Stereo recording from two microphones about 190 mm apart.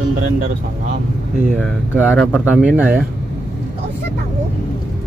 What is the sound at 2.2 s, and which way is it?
Speech, 5° left (ahead or behind).